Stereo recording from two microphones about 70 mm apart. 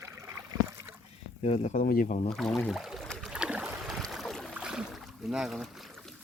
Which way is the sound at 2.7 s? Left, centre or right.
Centre.